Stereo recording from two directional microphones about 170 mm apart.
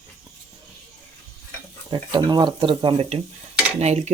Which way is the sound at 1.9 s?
25° right (ahead or behind).